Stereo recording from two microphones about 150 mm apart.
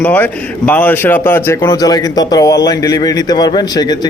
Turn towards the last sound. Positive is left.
turn(degrees=30)  # may be behind; listen again after turning